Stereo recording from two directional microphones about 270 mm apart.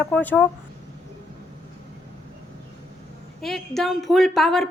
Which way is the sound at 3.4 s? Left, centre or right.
Centre.